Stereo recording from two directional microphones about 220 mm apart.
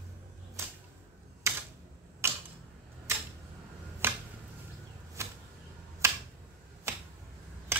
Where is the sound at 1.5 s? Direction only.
15° right (ahead or behind).